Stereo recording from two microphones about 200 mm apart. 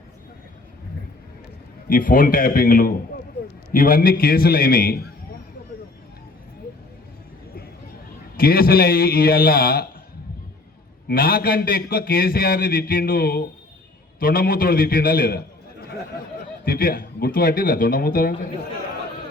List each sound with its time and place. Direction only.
1.9 s a man's voice: 45° left (ahead or behind)
8.4 s a man's voice: 50° left (ahead or behind)
11.1 s a man's voice: 50° left (ahead or behind)